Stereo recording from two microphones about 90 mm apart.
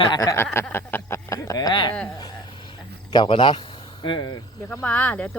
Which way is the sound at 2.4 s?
65° left (ahead or behind).